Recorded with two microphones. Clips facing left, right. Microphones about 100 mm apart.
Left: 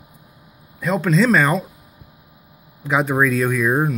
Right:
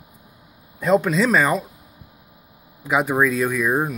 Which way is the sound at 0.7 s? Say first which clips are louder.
Right 3 dB; 20° right (ahead or behind).